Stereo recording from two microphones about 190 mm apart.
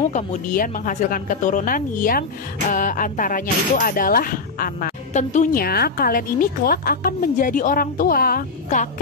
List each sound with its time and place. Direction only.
0.1 s speech: 40° left (ahead or behind)